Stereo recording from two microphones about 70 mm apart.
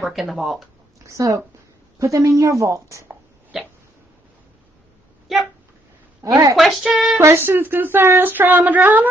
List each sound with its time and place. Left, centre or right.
0.0 s speech: centre
1.0 s a woman's voice: right
3.5 s hiccup: centre
6.2 s a woman's voice: right
6.5 s speech: centre
7.2 s speech: right